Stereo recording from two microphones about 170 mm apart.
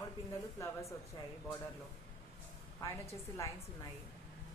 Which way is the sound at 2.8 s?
20° left (ahead or behind).